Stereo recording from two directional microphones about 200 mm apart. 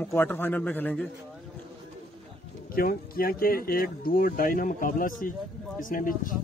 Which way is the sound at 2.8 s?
45° left (ahead or behind).